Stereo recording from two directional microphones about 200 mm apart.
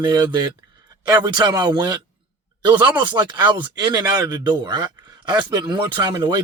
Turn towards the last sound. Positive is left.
turn(degrees=-20)  # may be behind; listen again after turning